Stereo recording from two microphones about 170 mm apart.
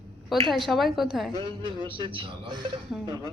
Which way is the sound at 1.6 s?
30° right (ahead or behind).